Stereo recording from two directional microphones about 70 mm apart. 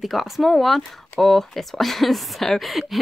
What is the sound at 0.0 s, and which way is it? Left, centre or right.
Speech, centre.